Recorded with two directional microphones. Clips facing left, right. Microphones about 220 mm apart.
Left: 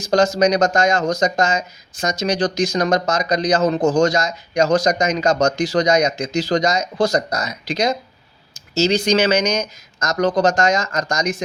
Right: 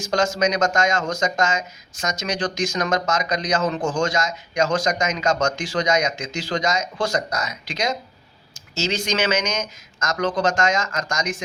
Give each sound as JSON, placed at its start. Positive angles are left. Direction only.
{"t": 0.0, "sound": "speech", "side_deg": 35}